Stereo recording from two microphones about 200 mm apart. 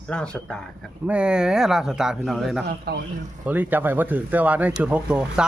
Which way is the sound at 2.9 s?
50° right (ahead or behind).